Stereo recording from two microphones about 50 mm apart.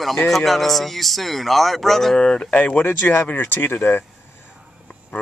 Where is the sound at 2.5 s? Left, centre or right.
Left.